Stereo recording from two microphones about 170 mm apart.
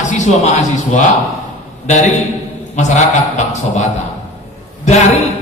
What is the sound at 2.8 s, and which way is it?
Speech, 45° left (ahead or behind).